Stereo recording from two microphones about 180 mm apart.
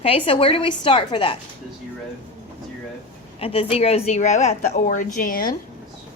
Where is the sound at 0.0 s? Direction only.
30° left (ahead or behind).